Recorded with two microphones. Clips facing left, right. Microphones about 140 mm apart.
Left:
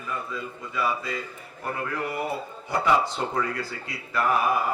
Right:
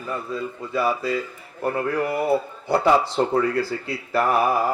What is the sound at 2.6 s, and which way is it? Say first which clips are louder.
A man's voice: right 3 dB; 35° right (ahead or behind).